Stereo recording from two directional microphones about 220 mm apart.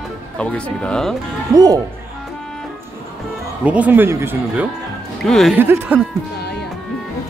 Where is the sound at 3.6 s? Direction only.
5° right (ahead or behind).